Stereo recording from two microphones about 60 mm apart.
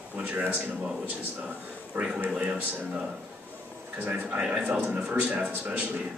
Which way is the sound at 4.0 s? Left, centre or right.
Right.